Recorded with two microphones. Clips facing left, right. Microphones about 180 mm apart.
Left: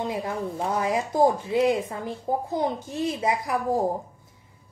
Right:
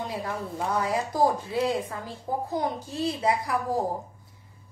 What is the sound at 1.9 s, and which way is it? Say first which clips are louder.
A woman's voice: left 4 dB; 20° left (ahead or behind).